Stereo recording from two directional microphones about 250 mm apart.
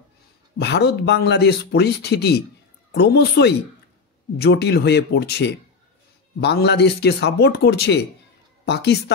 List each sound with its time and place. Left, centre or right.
0.6 s a woman's voice: left